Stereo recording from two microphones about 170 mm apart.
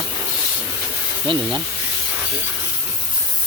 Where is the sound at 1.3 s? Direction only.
30° right (ahead or behind).